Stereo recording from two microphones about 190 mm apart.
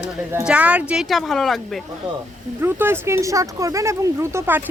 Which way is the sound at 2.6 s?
10° right (ahead or behind).